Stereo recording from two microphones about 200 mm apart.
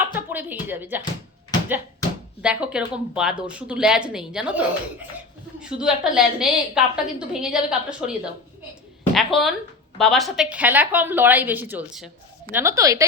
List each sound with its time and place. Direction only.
0.1 s speech: 10° right (ahead or behind)
2.4 s a woman's voice: 5° right (ahead or behind)